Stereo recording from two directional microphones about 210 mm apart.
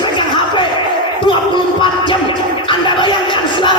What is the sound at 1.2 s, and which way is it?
Music, 25° left (ahead or behind).